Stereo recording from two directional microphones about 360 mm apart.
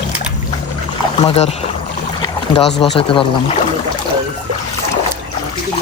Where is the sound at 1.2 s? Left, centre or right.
Centre.